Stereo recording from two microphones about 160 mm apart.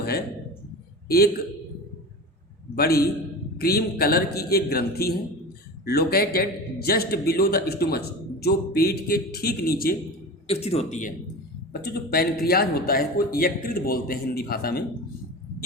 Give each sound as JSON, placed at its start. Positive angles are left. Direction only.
{"t": 1.0, "sound": "a man's voice", "side_deg": 75}
{"t": 2.7, "sound": "a man's voice", "side_deg": 70}
{"t": 10.4, "sound": "speech", "side_deg": 40}
{"t": 11.7, "sound": "a man's voice", "side_deg": 75}